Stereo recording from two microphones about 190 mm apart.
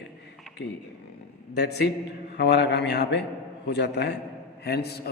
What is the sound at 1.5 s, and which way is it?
A man's voice, 60° left (ahead or behind).